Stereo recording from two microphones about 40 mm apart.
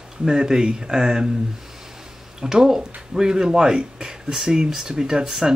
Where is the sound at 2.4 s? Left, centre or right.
Centre.